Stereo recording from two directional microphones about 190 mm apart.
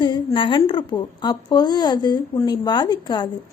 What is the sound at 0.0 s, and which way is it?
A woman's voice, 25° left (ahead or behind).